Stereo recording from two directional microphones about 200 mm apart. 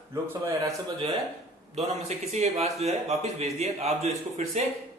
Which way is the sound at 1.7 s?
35° right (ahead or behind).